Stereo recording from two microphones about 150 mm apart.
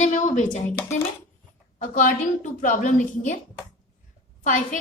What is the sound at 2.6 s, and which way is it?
Speech, 60° left (ahead or behind).